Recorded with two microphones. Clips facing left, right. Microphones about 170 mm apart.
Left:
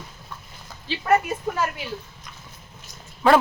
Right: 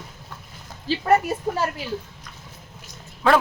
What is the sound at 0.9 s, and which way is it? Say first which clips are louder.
Speech: right 2 dB; 35° right (ahead or behind).